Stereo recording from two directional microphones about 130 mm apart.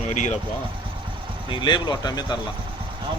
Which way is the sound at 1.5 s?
35° left (ahead or behind).